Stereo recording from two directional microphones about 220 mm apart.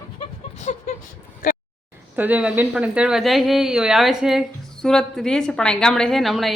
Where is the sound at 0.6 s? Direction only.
35° left (ahead or behind).